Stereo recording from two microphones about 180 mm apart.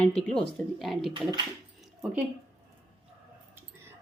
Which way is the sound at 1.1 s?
25° right (ahead or behind).